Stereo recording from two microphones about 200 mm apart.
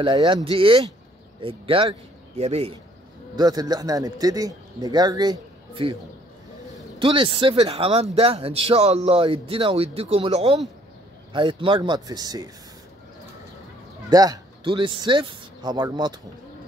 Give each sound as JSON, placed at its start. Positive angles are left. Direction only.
{"t": 0.0, "sound": "speech", "side_deg": -25}
{"t": 3.3, "sound": "speech", "side_deg": -20}
{"t": 7.0, "sound": "speech", "side_deg": -25}
{"t": 14.1, "sound": "speech", "side_deg": -20}